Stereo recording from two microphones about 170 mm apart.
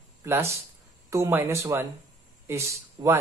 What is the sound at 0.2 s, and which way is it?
Speech, 15° right (ahead or behind).